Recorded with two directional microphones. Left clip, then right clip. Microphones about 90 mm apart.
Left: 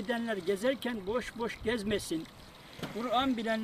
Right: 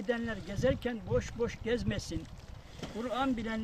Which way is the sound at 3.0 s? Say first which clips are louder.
Left 3 dB; 35° right (ahead or behind).